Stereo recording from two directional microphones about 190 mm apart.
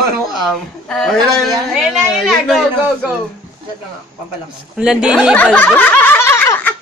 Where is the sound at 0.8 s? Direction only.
5° left (ahead or behind).